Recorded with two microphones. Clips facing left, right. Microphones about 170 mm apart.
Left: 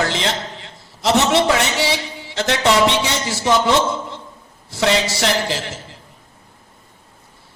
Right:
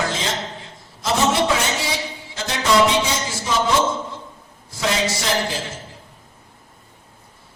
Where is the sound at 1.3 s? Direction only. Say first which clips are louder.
Left 3 dB; 75° left (ahead or behind).